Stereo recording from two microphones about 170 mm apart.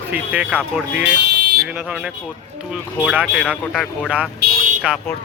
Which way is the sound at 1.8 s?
5° right (ahead or behind).